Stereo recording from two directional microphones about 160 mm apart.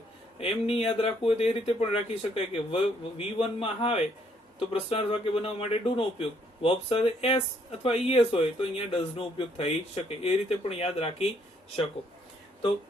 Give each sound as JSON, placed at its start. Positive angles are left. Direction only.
{"t": 0.3, "sound": "speech", "side_deg": 35}